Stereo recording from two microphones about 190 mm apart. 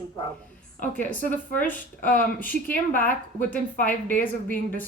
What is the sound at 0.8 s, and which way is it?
Speech, 45° left (ahead or behind).